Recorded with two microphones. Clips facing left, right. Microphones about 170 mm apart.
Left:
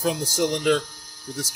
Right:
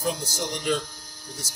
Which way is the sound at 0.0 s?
90° left.